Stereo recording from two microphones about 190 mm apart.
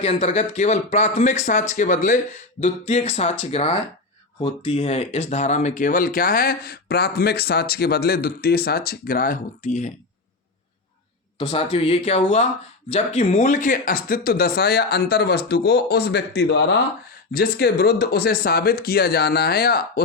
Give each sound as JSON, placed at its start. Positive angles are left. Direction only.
{"t": 0.0, "sound": "speech", "side_deg": 35}
{"t": 11.3, "sound": "speech", "side_deg": 30}
{"t": 17.3, "sound": "speech", "side_deg": 55}